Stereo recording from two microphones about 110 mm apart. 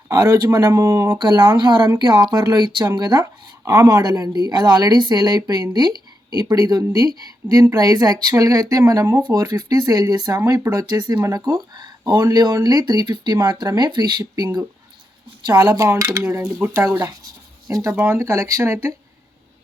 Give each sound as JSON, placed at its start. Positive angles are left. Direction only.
{"t": 0.1, "sound": "speech", "side_deg": -35}
{"t": 1.2, "sound": "speech", "side_deg": -45}
{"t": 3.6, "sound": "speech", "side_deg": -25}
{"t": 17.0, "sound": "writing", "side_deg": -30}
{"t": 17.9, "sound": "speech", "side_deg": -25}